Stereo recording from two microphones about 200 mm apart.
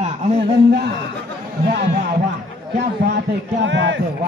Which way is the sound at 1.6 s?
50° right (ahead or behind).